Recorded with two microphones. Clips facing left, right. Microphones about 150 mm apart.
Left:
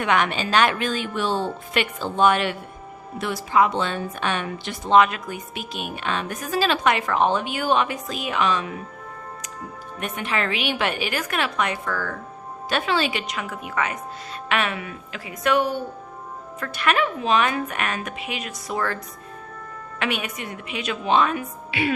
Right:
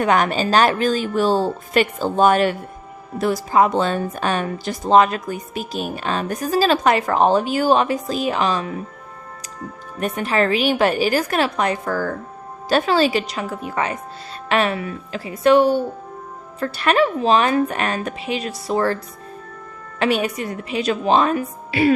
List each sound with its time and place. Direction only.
0.0 s speech: 40° right (ahead or behind)
10.0 s speech: 40° right (ahead or behind)
20.0 s speech: 35° right (ahead or behind)